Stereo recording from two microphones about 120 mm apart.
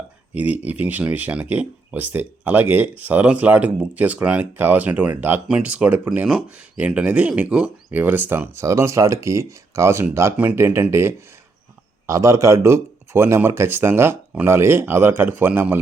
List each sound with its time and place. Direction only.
0.3 s speech: 15° right (ahead or behind)